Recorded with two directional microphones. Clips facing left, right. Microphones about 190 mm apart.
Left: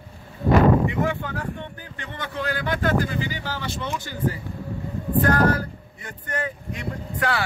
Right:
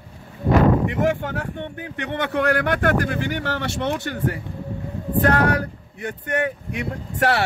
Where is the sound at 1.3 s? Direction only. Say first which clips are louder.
Right 3 dB; 65° right (ahead or behind).